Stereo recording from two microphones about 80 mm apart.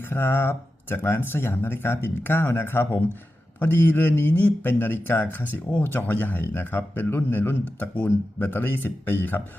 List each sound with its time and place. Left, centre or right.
0.0 s speech: left